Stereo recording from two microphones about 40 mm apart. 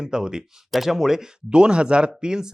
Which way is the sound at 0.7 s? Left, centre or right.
Centre.